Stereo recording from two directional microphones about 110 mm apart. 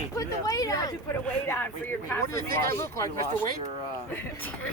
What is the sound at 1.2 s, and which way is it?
Speech, 15° left (ahead or behind).